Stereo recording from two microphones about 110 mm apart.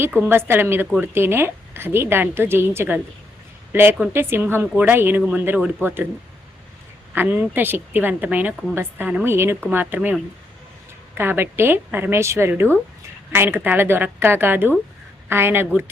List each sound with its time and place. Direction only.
0.0 s a woman's voice: 20° right (ahead or behind)
7.1 s a woman's voice: 15° right (ahead or behind)